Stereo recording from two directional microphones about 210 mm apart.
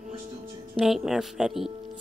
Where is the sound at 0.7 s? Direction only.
Centre (ahead or behind).